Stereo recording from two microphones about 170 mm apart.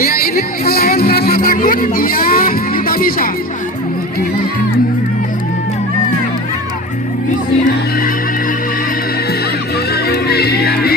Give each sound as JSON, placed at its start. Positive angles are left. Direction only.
{"t": 0.0, "sound": "speech", "side_deg": 60}
{"t": 9.9, "sound": "music", "side_deg": 65}